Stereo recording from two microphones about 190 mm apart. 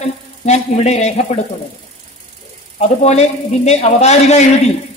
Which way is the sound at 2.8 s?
35° left (ahead or behind).